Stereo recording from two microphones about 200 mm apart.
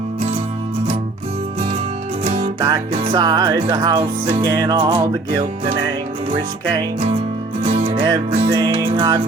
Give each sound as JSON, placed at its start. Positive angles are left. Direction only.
{"t": 2.2, "sound": "music", "side_deg": -30}
{"t": 2.6, "sound": "music", "side_deg": -20}